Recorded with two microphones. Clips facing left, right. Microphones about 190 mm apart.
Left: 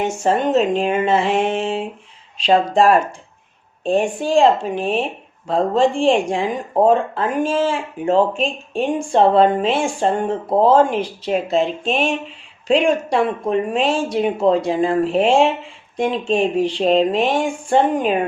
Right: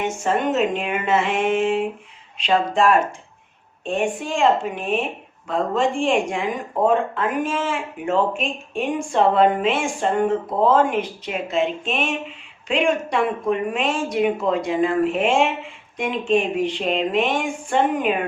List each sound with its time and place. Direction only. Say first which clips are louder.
0.0 s speech: left 3 dB; 35° left (ahead or behind)